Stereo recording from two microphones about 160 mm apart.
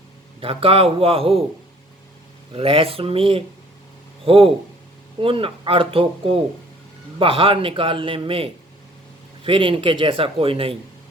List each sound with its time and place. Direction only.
0.3 s a man's voice: 35° right (ahead or behind)
2.5 s a man's voice: 35° right (ahead or behind)